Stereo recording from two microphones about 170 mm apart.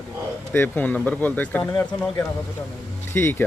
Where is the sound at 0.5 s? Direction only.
10° left (ahead or behind).